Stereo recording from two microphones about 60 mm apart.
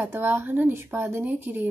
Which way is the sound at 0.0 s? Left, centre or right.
Right.